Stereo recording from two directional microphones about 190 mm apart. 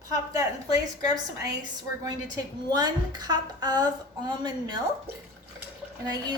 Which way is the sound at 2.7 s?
20° right (ahead or behind).